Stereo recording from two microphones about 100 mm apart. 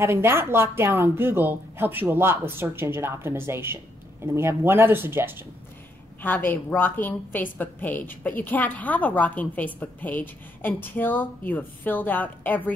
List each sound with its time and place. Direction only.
0.0 s a woman's voice: 25° right (ahead or behind)
6.2 s a woman's voice: 20° left (ahead or behind)